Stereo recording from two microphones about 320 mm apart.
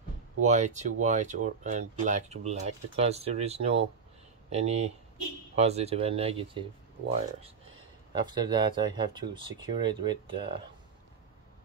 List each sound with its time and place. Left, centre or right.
0.4 s speech: right
8.1 s speech: centre